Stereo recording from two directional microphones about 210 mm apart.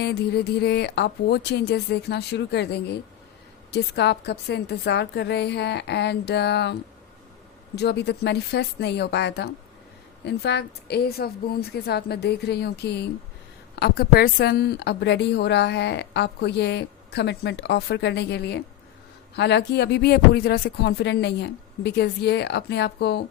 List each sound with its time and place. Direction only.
0.0 s a woman's voice: 50° left (ahead or behind)
7.8 s a woman's voice: 50° left (ahead or behind)